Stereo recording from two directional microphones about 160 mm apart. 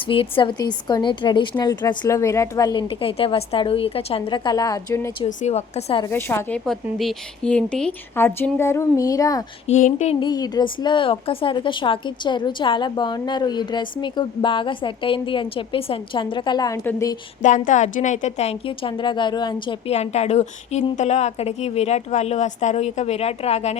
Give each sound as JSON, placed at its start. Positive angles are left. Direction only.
{"t": 0.0, "sound": "a woman's voice", "side_deg": 35}
{"t": 5.4, "sound": "a woman's voice", "side_deg": 45}
{"t": 6.1, "sound": "a woman's voice", "side_deg": 15}
{"t": 7.0, "sound": "speech", "side_deg": 5}
{"t": 9.6, "sound": "a woman's voice", "side_deg": 45}
{"t": 10.2, "sound": "a woman's voice", "side_deg": 25}
{"t": 17.4, "sound": "a woman's voice", "side_deg": 50}
{"t": 20.0, "sound": "a woman's voice", "side_deg": 40}